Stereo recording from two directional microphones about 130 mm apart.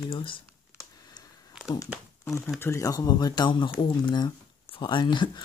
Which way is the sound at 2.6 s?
25° left (ahead or behind).